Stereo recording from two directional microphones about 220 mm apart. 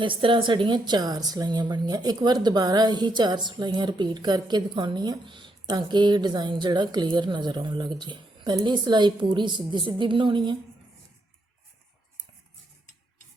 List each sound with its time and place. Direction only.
0.0 s speech: 25° right (ahead or behind)